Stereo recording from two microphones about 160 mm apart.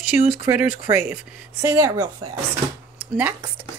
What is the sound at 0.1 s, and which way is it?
Speech, 10° right (ahead or behind).